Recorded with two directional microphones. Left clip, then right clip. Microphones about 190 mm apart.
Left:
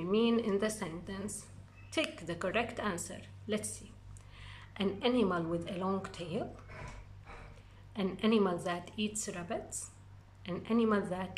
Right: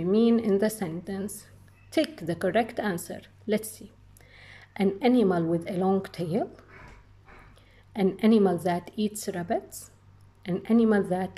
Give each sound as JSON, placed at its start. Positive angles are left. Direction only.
{"t": 0.0, "sound": "a woman's voice", "side_deg": -20}
{"t": 7.9, "sound": "a woman's voice", "side_deg": -25}